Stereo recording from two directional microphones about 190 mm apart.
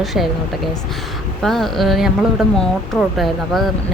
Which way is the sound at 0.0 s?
Centre (ahead or behind).